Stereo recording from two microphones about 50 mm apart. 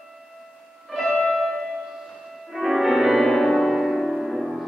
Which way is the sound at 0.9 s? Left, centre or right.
Centre.